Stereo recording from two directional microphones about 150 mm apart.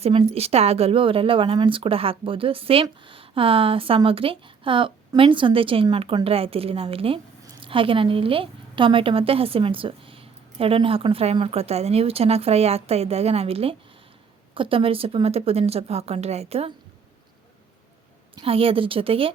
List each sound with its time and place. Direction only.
0.0 s a woman's voice: 40° right (ahead or behind)
18.3 s a woman's voice: 40° right (ahead or behind)